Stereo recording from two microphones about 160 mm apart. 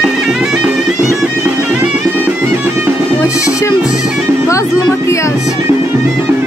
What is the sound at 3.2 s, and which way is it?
Music, 20° left (ahead or behind).